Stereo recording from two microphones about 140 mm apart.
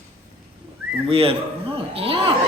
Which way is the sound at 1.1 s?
40° right (ahead or behind).